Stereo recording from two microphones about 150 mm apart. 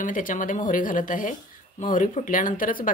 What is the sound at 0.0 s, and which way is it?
Speech, 60° left (ahead or behind).